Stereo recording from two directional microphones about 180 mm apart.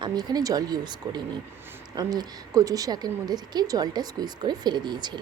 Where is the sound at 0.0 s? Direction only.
20° right (ahead or behind).